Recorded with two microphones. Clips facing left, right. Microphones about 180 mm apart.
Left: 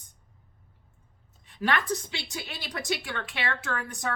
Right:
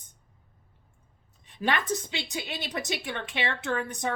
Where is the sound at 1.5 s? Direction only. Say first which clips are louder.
Even; 20° right (ahead or behind).